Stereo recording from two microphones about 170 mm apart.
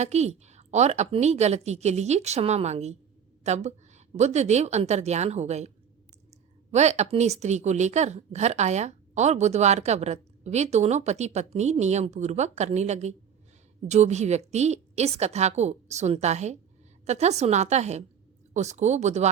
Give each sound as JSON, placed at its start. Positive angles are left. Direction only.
{"t": 0.0, "sound": "speech", "side_deg": -40}
{"t": 6.7, "sound": "speech", "side_deg": -40}